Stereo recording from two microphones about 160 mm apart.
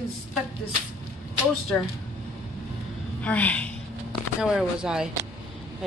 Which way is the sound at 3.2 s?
10° left (ahead or behind).